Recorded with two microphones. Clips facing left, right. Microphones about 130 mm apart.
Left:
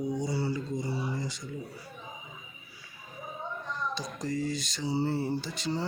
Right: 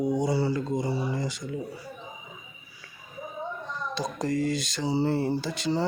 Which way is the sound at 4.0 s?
75° right (ahead or behind).